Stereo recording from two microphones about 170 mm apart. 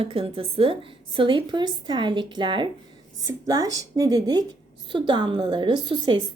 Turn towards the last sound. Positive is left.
turn(degrees=-30)  # may be behind; listen again after turning